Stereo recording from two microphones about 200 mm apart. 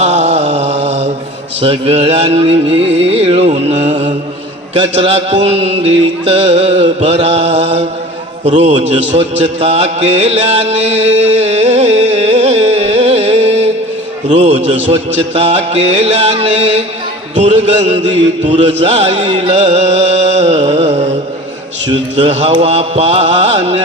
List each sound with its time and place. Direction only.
0.0 s mantra: 35° right (ahead or behind)
1.6 s music: 30° right (ahead or behind)
14.8 s music: 30° right (ahead or behind)